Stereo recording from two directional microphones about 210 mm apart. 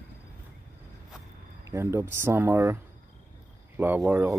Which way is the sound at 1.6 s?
10° right (ahead or behind).